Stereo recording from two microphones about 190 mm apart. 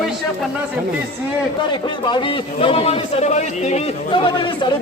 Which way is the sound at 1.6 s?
25° left (ahead or behind).